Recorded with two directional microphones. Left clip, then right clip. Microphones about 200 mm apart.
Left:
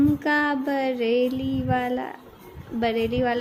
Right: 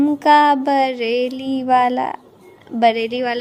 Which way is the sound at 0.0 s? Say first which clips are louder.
Right 10 dB; 35° right (ahead or behind).